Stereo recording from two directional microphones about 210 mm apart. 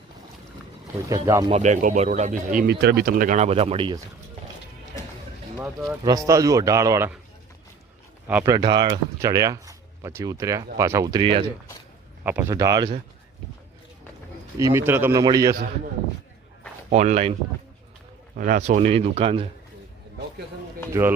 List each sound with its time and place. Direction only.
1.1 s a man's voice: 15° right (ahead or behind)
1.5 s speech: 35° right (ahead or behind)
2.6 s speech: 50° right (ahead or behind); by 4.0 s 25° right (ahead or behind)
6.0 s a man's voice: 15° right (ahead or behind)
8.3 s a man's voice: 10° right (ahead or behind)
8.5 s speech: 20° right (ahead or behind)
12.2 s a man's voice: 10° right (ahead or behind)
14.6 s a man's voice: 10° right (ahead or behind)
16.9 s speech: 30° right (ahead or behind)
18.3 s speech: 40° right (ahead or behind)